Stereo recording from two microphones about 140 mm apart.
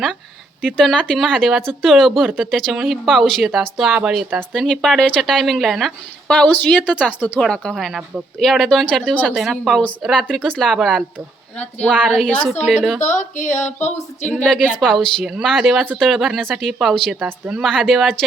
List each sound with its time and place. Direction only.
0.6 s speech: 5° left (ahead or behind)
7.4 s speech: 5° left (ahead or behind)
13.0 s a sound: 60° left (ahead or behind)
14.3 s a woman's voice: 10° left (ahead or behind)